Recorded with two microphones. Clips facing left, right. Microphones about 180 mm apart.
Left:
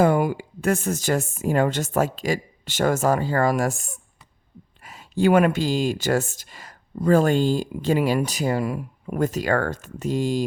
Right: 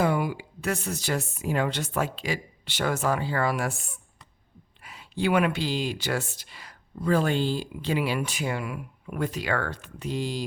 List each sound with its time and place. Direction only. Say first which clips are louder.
0.0 s speech: left 6 dB; 45° left (ahead or behind)